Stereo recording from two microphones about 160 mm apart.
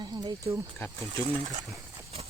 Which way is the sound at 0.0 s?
25° right (ahead or behind).